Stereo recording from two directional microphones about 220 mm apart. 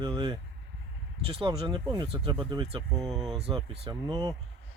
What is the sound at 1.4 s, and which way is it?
Speech, 20° right (ahead or behind).